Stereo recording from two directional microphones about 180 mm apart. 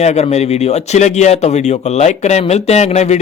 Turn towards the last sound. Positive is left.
turn(degrees=40)  # may be behind; listen again after turning